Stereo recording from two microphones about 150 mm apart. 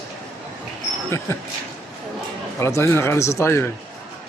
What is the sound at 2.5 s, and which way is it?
A man's voice, 20° left (ahead or behind).